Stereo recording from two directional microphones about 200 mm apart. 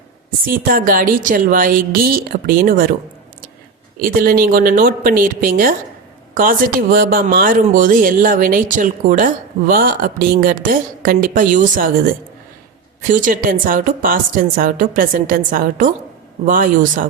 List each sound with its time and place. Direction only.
0.4 s speech: 45° right (ahead or behind)
4.2 s speech: 45° right (ahead or behind)